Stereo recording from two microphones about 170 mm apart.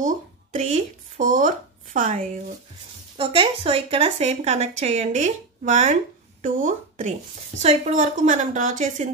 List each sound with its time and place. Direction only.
0.0 s a woman's voice: 45° right (ahead or behind)
3.2 s a woman's voice: 30° right (ahead or behind)